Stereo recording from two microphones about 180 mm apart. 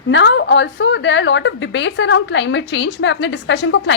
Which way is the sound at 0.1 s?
85° left.